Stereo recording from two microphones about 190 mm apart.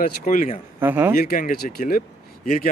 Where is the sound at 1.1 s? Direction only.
50° left (ahead or behind).